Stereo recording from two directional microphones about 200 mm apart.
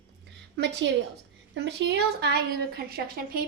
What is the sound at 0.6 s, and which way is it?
A woman's voice, 60° right (ahead or behind).